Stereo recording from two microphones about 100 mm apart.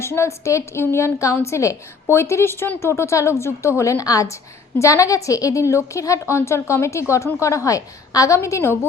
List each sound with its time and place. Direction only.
0.0 s a woman's voice: 25° left (ahead or behind)